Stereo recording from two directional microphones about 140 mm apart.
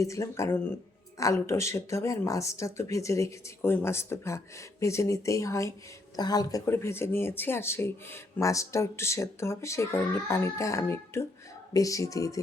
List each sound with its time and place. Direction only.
0.0 s speech: 20° left (ahead or behind)